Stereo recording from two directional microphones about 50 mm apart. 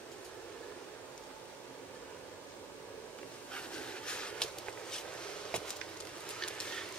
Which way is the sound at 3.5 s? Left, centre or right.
Left.